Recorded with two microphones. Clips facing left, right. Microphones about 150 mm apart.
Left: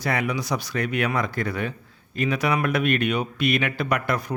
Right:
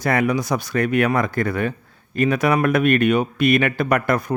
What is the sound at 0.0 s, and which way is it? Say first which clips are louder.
Speech: right 6 dB; 50° right (ahead or behind).